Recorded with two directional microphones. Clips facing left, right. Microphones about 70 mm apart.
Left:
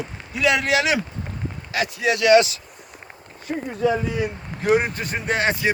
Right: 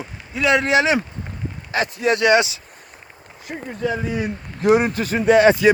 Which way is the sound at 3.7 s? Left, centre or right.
Centre.